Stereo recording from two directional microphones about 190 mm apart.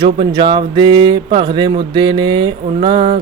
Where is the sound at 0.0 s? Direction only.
25° right (ahead or behind).